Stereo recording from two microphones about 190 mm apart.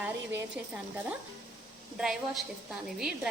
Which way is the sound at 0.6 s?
10° right (ahead or behind).